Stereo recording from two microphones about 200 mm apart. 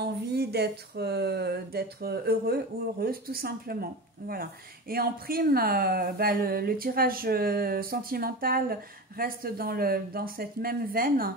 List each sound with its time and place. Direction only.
0.0 s speech: 55° right (ahead or behind)